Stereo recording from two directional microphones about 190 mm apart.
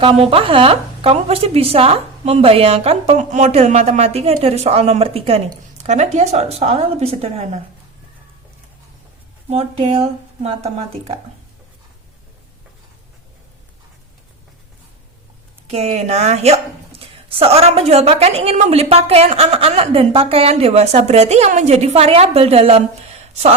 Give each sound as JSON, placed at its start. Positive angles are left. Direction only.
{"t": 0.0, "sound": "speech", "side_deg": -30}
{"t": 9.5, "sound": "speech", "side_deg": -35}
{"t": 15.7, "sound": "speech", "side_deg": -35}